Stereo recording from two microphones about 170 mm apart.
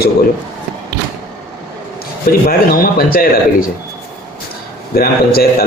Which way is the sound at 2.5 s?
60° left (ahead or behind).